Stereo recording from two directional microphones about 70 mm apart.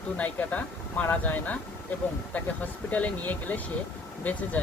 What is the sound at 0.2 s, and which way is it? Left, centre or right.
Speech, left.